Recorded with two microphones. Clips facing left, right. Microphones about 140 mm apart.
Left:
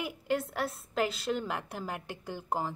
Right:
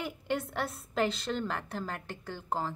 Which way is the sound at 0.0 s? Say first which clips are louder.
Left 2 dB; centre (ahead or behind).